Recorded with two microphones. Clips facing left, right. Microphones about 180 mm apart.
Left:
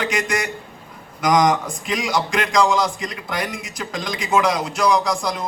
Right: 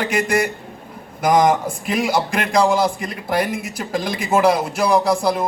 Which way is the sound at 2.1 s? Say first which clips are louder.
Left 1 dB; 55° right (ahead or behind).